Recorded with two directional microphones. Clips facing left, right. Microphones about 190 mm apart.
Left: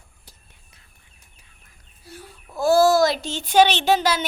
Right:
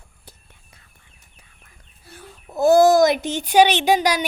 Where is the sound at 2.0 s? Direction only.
55° right (ahead or behind).